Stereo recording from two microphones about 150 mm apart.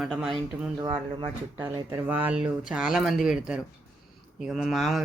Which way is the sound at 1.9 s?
10° right (ahead or behind).